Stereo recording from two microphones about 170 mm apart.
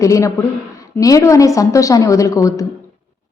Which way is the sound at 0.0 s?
20° left (ahead or behind).